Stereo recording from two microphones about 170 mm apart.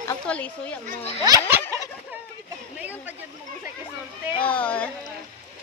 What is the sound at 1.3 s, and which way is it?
Speech, 15° right (ahead or behind).